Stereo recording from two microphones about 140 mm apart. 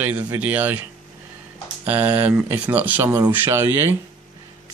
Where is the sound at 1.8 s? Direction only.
10° right (ahead or behind).